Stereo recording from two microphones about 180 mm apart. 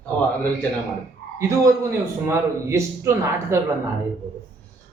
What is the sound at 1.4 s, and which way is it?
Speech, 15° right (ahead or behind).